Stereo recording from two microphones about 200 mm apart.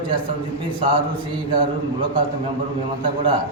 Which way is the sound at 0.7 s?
25° right (ahead or behind).